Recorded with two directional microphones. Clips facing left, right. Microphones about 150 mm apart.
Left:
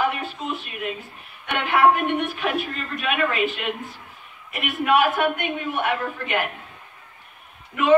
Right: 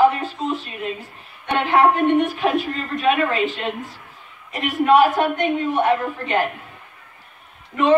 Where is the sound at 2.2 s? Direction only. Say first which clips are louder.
Right 5 dB; 40° right (ahead or behind).